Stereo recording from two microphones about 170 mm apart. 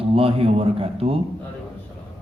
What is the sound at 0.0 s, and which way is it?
Speech, 35° right (ahead or behind).